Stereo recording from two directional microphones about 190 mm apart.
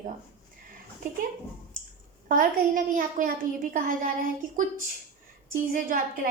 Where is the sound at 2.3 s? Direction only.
45° right (ahead or behind).